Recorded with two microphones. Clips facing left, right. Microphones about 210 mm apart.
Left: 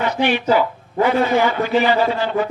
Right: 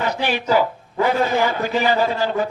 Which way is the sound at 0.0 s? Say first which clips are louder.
Left 4 dB; 40° right (ahead or behind).